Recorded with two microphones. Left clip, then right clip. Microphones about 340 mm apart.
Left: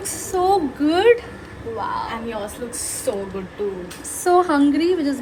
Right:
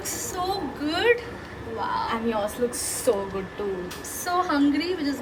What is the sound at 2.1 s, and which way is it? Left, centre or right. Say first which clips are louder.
Speech: right 1 dB; right.